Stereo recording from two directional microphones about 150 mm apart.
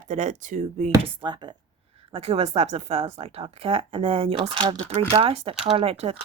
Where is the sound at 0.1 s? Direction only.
50° right (ahead or behind).